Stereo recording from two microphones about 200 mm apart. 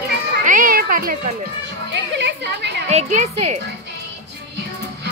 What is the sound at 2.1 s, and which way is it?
Chatter, 60° right (ahead or behind).